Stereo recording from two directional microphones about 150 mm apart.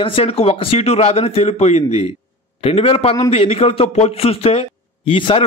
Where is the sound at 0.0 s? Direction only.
40° left (ahead or behind).